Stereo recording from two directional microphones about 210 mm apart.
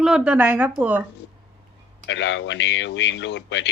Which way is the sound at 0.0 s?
5° right (ahead or behind).